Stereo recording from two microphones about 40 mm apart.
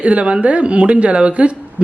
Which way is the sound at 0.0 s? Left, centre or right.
Right.